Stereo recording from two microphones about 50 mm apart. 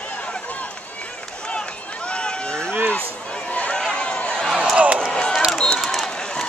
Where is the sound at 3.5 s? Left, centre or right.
Left.